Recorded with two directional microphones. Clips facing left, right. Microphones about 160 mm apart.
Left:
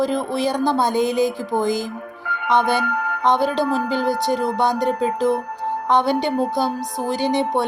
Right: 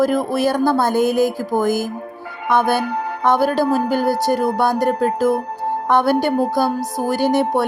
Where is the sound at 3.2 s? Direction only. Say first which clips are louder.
Right 2 dB; 20° left (ahead or behind).